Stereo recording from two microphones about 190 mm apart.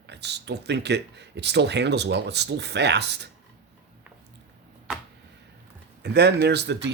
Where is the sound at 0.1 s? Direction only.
65° right (ahead or behind).